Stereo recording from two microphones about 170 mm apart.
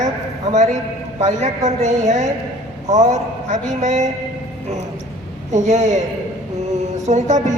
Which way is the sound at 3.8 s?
45° right (ahead or behind).